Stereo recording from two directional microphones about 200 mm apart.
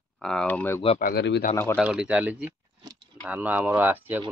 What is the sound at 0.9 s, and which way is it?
Speech, 50° left (ahead or behind).